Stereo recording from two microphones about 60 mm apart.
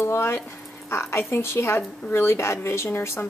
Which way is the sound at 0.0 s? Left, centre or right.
Left.